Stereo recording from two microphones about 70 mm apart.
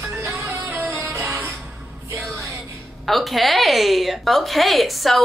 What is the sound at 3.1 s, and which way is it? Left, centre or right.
Speech, centre.